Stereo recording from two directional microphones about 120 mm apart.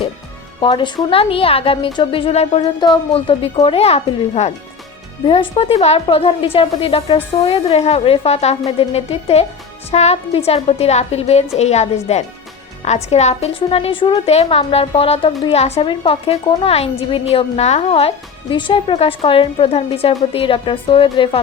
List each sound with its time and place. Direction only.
0.6 s a woman's voice: 40° left (ahead or behind); by 4.5 s 60° left (ahead or behind)
5.2 s a woman's voice: 45° left (ahead or behind); by 13.6 s 65° left (ahead or behind)
13.6 s a woman's voice: 50° left (ahead or behind)
14.3 s a woman's voice: 60° left (ahead or behind)
18.5 s a woman's voice: 45° left (ahead or behind)